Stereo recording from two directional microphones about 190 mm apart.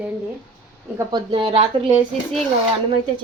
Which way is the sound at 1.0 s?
20° right (ahead or behind).